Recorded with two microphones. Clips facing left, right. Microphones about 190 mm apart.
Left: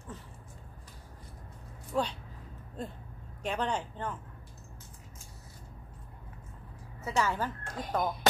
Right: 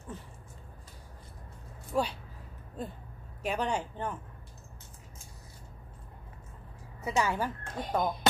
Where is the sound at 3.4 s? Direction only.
10° right (ahead or behind).